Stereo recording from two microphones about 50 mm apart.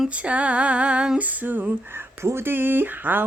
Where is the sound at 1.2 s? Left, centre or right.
Right.